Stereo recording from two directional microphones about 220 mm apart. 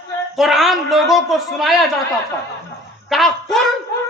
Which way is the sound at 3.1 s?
Centre (ahead or behind).